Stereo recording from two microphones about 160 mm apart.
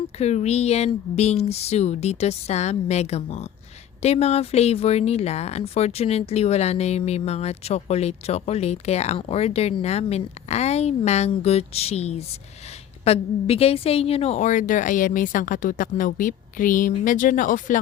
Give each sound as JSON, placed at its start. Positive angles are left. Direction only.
{"t": 0.2, "sound": "a woman's voice", "side_deg": 45}